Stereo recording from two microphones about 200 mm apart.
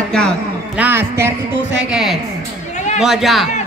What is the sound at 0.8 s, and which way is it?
A man's voice, 10° right (ahead or behind).